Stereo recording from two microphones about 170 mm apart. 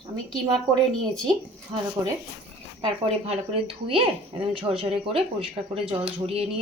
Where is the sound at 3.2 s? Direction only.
35° right (ahead or behind).